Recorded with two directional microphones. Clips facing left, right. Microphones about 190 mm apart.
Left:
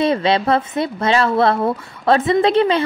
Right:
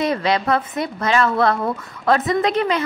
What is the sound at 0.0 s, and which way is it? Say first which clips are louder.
A woman's voice: left 3 dB; 25° left (ahead or behind).